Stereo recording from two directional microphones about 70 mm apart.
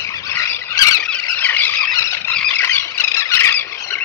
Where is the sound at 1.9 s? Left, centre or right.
Left.